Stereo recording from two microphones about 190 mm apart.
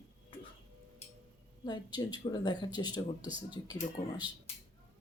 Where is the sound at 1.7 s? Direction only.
20° left (ahead or behind).